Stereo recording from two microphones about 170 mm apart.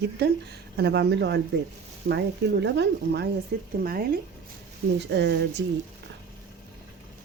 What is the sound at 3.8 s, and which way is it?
Speech, 60° right (ahead or behind).